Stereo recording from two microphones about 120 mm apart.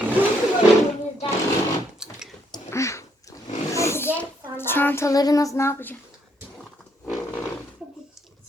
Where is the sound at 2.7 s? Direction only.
25° left (ahead or behind).